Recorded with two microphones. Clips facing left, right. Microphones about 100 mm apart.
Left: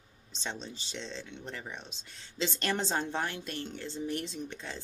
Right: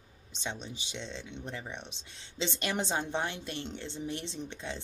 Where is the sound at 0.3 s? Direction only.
15° right (ahead or behind).